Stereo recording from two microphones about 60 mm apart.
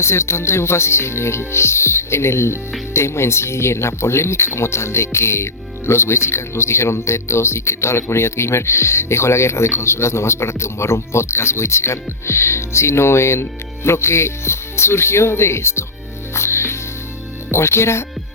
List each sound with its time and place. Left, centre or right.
0.0 s speech: left
16.3 s music: left
17.5 s speech: left